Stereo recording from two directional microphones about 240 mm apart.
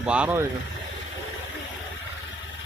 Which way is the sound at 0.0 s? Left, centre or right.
Centre.